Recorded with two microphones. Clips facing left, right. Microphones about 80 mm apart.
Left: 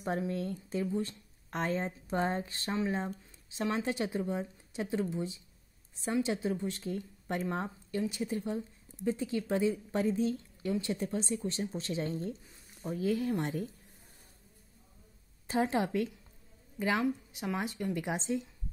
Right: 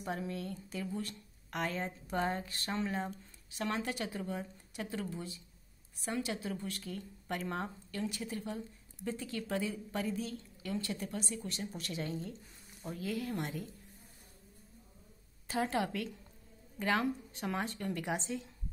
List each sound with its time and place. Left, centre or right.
0.3 s speech: left
15.4 s a woman's voice: left